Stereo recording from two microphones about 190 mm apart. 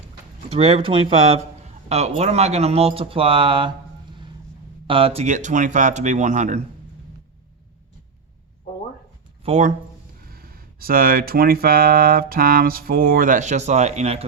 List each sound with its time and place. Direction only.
0.5 s speech: 30° right (ahead or behind)
4.9 s speech: 30° right (ahead or behind)
9.4 s speech: 40° right (ahead or behind)
10.2 s speech: 50° right (ahead or behind); by 14.3 s 35° right (ahead or behind)